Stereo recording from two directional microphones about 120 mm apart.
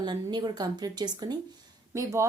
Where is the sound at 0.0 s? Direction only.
35° right (ahead or behind).